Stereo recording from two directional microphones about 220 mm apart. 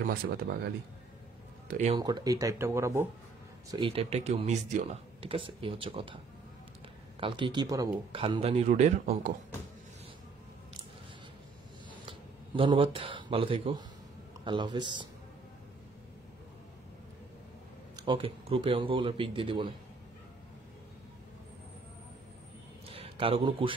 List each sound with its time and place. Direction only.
0.0 s speech: 40° right (ahead or behind)
1.7 s speech: 35° right (ahead or behind)
2.0 s speech: 20° right (ahead or behind)
3.7 s speech: 25° right (ahead or behind)
7.2 s speech: 20° right (ahead or behind)
12.1 s speech: 25° right (ahead or behind)
17.9 s speech: 20° right (ahead or behind)
22.8 s a sound: 25° right (ahead or behind)